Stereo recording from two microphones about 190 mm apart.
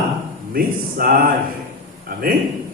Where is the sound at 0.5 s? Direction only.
50° right (ahead or behind).